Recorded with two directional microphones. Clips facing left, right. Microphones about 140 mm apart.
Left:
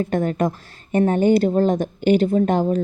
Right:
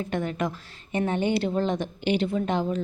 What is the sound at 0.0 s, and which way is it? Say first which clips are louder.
A woman's voice: left 7 dB; 45° left (ahead or behind).